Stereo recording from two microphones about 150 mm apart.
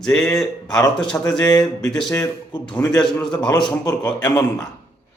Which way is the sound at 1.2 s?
25° left (ahead or behind).